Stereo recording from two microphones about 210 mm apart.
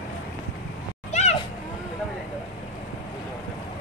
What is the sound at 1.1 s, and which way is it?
Cat, 35° left (ahead or behind).